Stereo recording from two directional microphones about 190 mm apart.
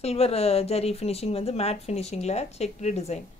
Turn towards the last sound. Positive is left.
turn(degrees=35)  # may be behind; listen again after turning